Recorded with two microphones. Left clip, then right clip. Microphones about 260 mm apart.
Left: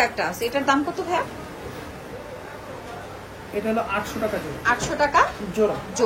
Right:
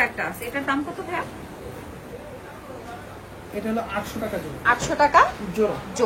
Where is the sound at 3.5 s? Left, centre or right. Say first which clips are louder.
Left 3 dB; centre.